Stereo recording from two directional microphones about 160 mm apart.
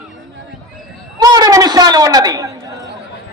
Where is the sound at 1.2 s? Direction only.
25° right (ahead or behind).